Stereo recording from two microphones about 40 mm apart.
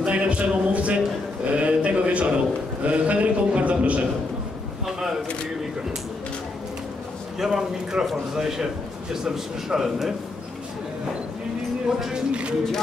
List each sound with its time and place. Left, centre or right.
0.0 s a man's voice: right
7.3 s a man's voice: centre
12.1 s speech: right